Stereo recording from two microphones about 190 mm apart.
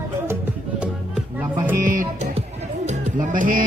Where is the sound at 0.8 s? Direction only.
5° right (ahead or behind).